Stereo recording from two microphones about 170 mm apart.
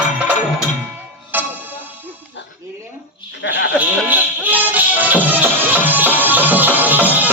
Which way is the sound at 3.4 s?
90° left.